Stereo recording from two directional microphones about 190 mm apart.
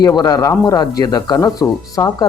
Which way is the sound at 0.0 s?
20° left (ahead or behind).